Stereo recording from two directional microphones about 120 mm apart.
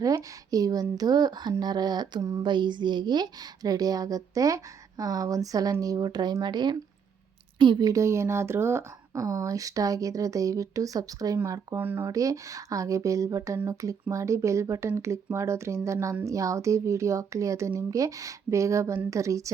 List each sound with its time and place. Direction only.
0.0 s speech: 30° right (ahead or behind)
11.8 s speech: 15° right (ahead or behind)
12.0 s speech: 30° right (ahead or behind)